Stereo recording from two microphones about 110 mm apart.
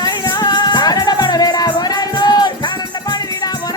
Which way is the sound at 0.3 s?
40° left (ahead or behind).